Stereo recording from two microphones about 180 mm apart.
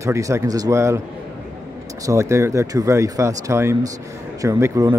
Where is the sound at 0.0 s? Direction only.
15° right (ahead or behind).